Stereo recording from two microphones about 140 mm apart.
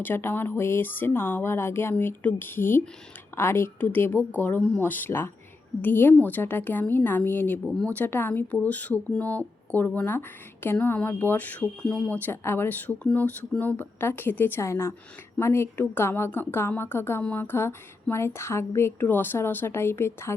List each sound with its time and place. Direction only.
0.0 s speech: 15° left (ahead or behind)
7.6 s speech: centre (ahead or behind)
7.9 s speech: 15° left (ahead or behind)